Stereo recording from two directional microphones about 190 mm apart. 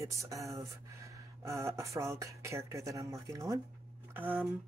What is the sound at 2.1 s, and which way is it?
Speech, 15° right (ahead or behind).